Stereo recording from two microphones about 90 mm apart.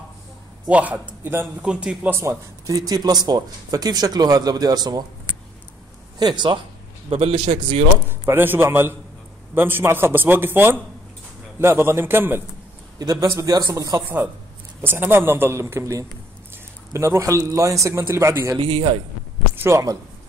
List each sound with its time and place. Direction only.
0.7 s a man's voice: 15° right (ahead or behind)
1.6 s a man's voice: 10° right (ahead or behind)
2.0 s a man's voice: 30° right (ahead or behind)
2.7 s speech: 45° right (ahead or behind)
6.1 s speech: 55° right (ahead or behind)
7.1 s a man's voice: 80° right
8.1 s a man's voice: 25° right (ahead or behind)
13.0 s a man's voice: 40° right (ahead or behind)
14.0 s a man's voice: 20° right (ahead or behind)
18.6 s a man's voice: 90° right
19.5 s a sound: 25° right (ahead or behind)